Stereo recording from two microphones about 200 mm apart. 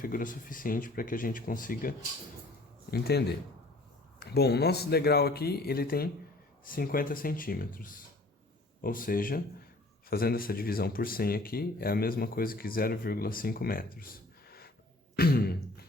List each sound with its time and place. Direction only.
0.0 s speech: 45° left (ahead or behind)
15.1 s throat clearing: 50° left (ahead or behind)